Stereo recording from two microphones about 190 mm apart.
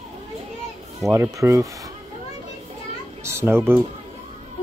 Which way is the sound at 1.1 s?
15° right (ahead or behind).